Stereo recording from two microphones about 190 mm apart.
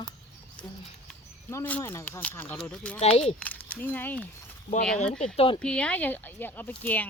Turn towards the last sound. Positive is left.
turn(degrees=10)  # may be behind; listen again after turning